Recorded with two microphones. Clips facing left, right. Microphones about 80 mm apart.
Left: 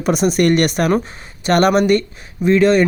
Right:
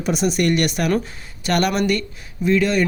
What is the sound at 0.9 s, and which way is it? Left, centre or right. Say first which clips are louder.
Speech: left 3 dB; left.